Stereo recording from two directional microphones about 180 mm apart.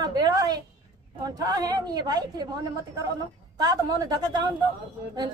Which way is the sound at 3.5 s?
20° right (ahead or behind).